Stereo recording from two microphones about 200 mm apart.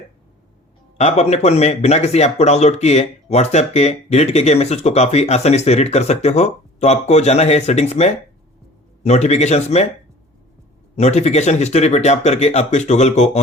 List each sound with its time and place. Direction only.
0.9 s speech: 35° left (ahead or behind)
10.9 s speech: 35° left (ahead or behind)